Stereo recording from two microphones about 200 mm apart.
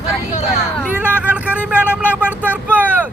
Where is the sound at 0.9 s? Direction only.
5° right (ahead or behind).